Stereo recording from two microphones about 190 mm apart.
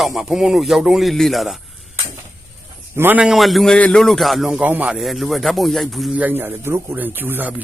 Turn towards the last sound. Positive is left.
turn(degrees=-10)  # may be behind; listen again after turning